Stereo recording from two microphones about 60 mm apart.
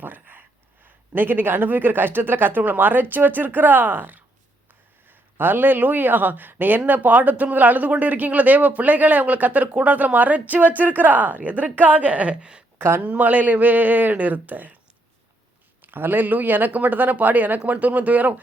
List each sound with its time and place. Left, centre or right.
0.0 s a sound: right
1.1 s speech: right; by 12.6 s centre
13.0 s speech: right
15.8 s speech: right